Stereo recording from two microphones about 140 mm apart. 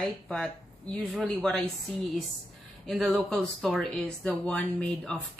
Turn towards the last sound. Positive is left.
turn(degrees=10)  # may be behind; listen again after turning